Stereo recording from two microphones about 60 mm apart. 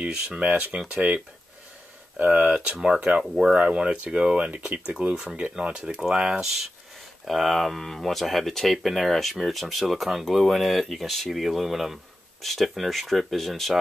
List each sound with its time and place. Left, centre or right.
0.0 s speech: centre
0.5 s speech: right
0.7 s speech: centre